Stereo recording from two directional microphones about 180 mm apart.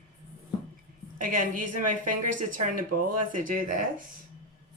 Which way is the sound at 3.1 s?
50° right (ahead or behind).